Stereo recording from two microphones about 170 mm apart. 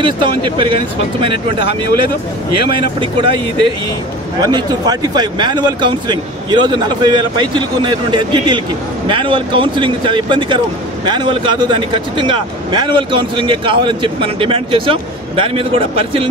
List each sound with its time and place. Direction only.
0.0 s speech: 30° right (ahead or behind)